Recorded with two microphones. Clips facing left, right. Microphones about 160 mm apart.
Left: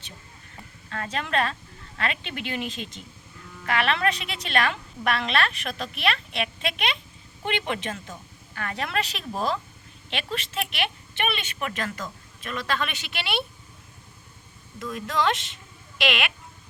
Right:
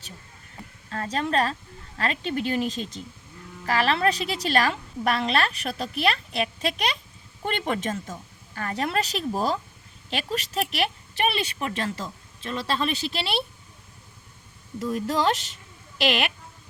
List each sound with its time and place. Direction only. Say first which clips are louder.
0.9 s a woman's voice: right 3 dB; 35° right (ahead or behind)
14.8 s a woman's voice: right 2 dB; 35° right (ahead or behind)